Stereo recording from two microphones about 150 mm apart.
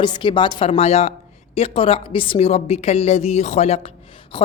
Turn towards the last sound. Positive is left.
turn(degrees=35)  # may be behind; listen again after turning